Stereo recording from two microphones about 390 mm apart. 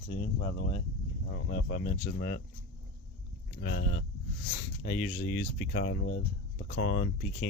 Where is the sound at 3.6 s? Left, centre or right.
Left.